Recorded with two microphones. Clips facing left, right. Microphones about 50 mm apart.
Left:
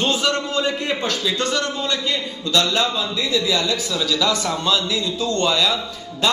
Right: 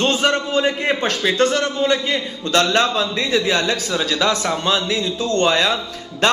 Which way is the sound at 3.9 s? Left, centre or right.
Right.